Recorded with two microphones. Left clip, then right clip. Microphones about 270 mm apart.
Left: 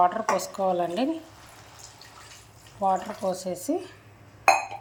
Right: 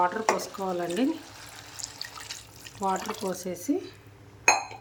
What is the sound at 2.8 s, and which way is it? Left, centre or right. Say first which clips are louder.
Speech: left 4 dB; right.